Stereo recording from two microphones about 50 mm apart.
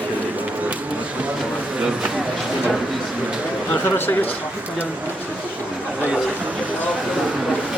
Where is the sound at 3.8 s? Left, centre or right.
Left.